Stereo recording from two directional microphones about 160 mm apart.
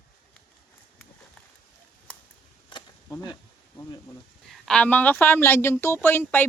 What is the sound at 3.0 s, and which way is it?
Speech, 20° left (ahead or behind).